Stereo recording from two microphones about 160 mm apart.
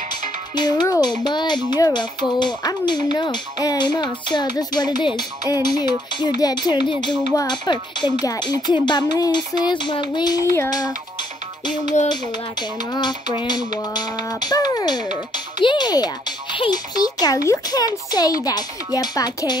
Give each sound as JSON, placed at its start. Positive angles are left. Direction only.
{"t": 0.6, "sound": "speech", "side_deg": 25}
{"t": 12.9, "sound": "speech", "side_deg": 30}